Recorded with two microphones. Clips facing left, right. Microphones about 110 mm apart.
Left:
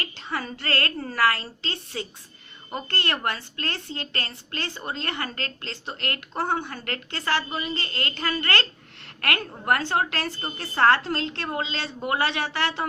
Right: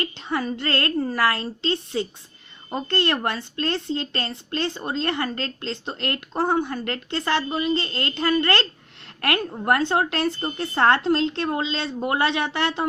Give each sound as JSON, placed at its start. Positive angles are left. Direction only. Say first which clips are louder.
{"t": 0.0, "sound": "speech", "louder": "right 5 dB", "side_deg": -25}